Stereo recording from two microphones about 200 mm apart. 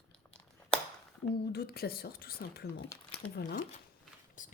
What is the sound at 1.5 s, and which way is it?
A woman's voice, 50° left (ahead or behind).